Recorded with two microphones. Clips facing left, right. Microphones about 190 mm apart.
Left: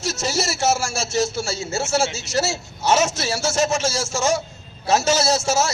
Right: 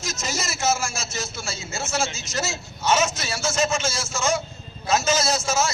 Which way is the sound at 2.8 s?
40° left (ahead or behind).